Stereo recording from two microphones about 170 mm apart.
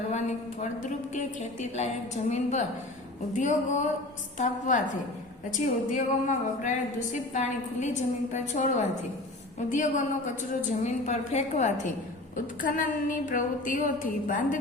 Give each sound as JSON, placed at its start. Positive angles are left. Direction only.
{"t": 0.1, "sound": "a woman's voice", "side_deg": 45}
{"t": 5.5, "sound": "a woman's voice", "side_deg": 50}